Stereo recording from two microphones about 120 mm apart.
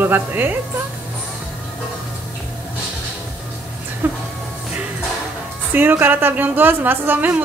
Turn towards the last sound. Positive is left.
turn(degrees=-15)  # may be behind; listen again after turning